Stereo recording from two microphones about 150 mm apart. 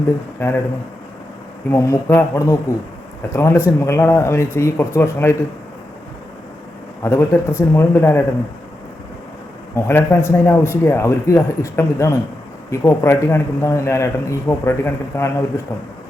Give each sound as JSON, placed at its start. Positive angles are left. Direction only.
{"t": 0.3, "sound": "speech", "side_deg": 15}
{"t": 1.7, "sound": "a man's voice", "side_deg": 15}
{"t": 7.0, "sound": "speech", "side_deg": 15}
{"t": 9.7, "sound": "a man's voice", "side_deg": 15}